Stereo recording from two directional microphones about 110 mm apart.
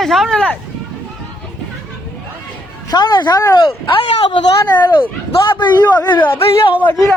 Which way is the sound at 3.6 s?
50° left (ahead or behind).